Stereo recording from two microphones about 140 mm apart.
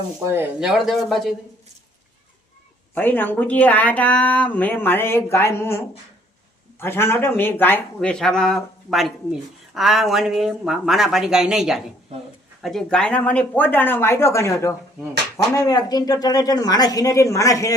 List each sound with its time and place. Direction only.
0.6 s speech: centre (ahead or behind)
2.9 s a woman's voice: 15° left (ahead or behind)